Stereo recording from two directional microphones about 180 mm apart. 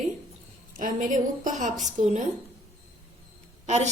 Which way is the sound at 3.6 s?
40° right (ahead or behind).